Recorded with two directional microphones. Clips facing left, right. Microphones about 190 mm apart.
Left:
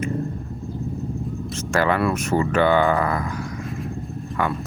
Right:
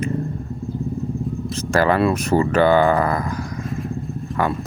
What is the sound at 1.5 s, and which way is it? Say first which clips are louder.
Speech: right 3 dB; 40° right (ahead or behind).